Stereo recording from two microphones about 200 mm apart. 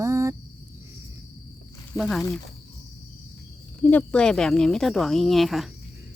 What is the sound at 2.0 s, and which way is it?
Speech, centre (ahead or behind).